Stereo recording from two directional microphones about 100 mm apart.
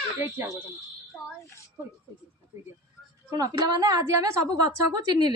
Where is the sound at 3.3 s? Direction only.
40° right (ahead or behind).